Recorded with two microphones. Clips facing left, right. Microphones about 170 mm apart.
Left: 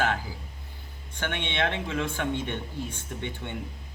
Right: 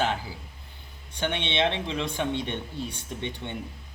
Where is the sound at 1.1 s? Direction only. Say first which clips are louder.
Right 3 dB; 20° right (ahead or behind).